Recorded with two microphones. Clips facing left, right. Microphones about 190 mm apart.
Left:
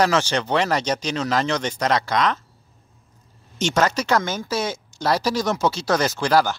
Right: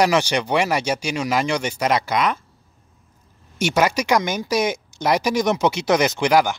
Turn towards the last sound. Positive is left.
turn(degrees=-15)  # may be behind; listen again after turning